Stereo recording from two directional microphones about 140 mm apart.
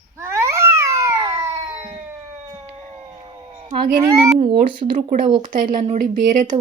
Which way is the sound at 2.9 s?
25° right (ahead or behind).